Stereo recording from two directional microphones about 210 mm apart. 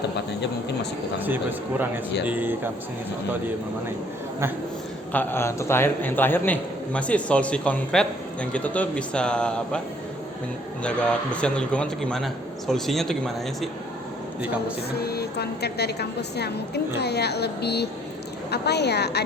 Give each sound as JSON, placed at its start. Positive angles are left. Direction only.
{"t": 1.2, "sound": "speech", "side_deg": -10}
{"t": 5.1, "sound": "a man's voice", "side_deg": 10}
{"t": 10.8, "sound": "a man's voice", "side_deg": 5}
{"t": 15.0, "sound": "a woman's voice", "side_deg": 50}